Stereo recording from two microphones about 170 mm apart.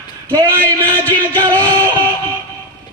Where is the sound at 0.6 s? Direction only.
10° left (ahead or behind).